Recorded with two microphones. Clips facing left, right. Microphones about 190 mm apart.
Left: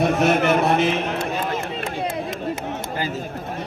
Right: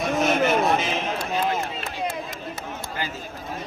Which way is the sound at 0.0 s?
65° left (ahead or behind).